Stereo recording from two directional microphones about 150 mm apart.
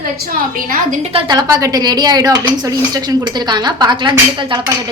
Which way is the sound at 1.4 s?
25° right (ahead or behind).